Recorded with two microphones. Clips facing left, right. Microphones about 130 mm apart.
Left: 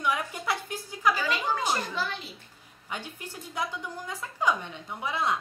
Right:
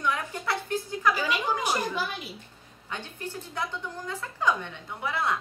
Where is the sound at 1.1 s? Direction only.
10° right (ahead or behind).